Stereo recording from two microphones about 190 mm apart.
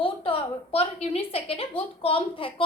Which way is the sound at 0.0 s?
30° left (ahead or behind).